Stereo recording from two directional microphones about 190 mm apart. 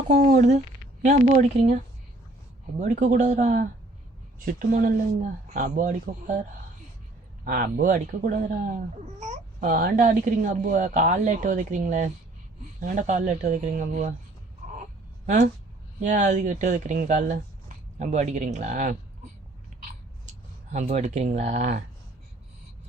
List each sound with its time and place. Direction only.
0.1 s speech: 40° right (ahead or behind)
7.4 s speech: 45° right (ahead or behind)
9.6 s speech: 45° right (ahead or behind)
16.0 s speech: 40° right (ahead or behind)
20.8 s speech: 35° right (ahead or behind)